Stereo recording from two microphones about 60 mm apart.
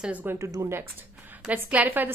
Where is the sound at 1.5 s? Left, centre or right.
Right.